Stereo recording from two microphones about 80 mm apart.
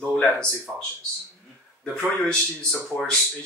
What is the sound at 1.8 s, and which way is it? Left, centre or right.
Speech, centre.